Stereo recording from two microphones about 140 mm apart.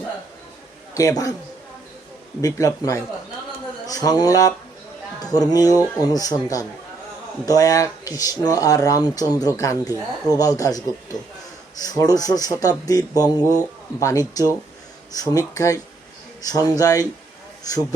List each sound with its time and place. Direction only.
0.9 s speech: 25° left (ahead or behind)
2.4 s speech: 25° left (ahead or behind)